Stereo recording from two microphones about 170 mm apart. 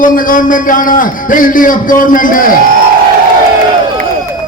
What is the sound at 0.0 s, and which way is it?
A man's voice, 55° left (ahead or behind).